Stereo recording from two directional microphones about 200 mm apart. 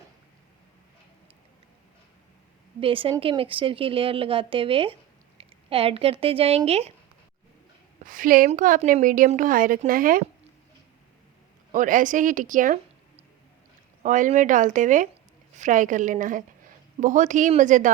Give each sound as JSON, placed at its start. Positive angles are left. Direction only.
{"t": 2.8, "sound": "a woman's voice", "side_deg": -25}
{"t": 8.0, "sound": "a woman's voice", "side_deg": -45}
{"t": 11.7, "sound": "speech", "side_deg": -40}
{"t": 14.0, "sound": "speech", "side_deg": -40}